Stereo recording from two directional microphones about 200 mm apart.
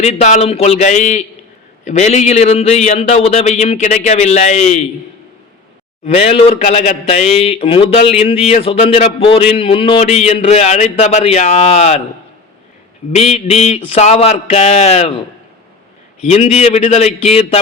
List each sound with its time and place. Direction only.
0.0 s a man's voice: 35° left (ahead or behind)
6.1 s a man's voice: 30° left (ahead or behind)
13.1 s a man's voice: 30° left (ahead or behind)
16.2 s a man's voice: 30° left (ahead or behind)